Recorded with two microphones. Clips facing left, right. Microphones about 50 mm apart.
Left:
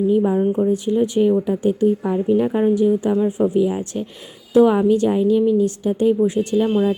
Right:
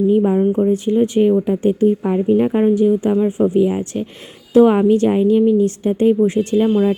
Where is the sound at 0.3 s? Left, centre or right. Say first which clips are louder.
Right 3 dB; centre.